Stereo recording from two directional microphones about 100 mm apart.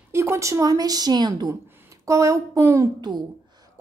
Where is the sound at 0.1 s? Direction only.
25° right (ahead or behind); by 1.5 s 40° right (ahead or behind).